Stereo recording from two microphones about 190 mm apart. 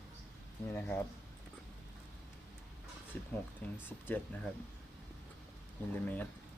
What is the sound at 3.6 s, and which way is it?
Speech, 10° left (ahead or behind).